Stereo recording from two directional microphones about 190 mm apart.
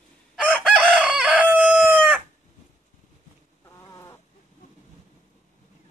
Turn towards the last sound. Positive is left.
turn(degrees=15)  # may be behind; listen again after turning